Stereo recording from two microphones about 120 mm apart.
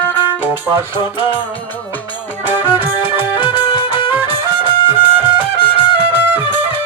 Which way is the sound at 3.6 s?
35° left (ahead or behind).